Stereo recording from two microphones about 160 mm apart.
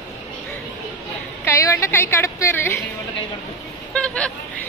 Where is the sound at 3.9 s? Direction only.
5° left (ahead or behind).